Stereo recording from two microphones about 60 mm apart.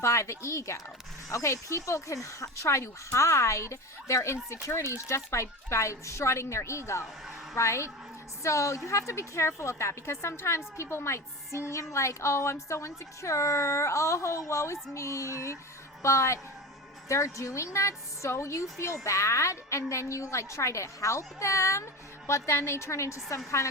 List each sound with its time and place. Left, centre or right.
0.0 s a woman's voice: left